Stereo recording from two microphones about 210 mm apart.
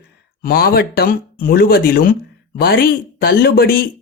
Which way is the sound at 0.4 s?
45° left (ahead or behind).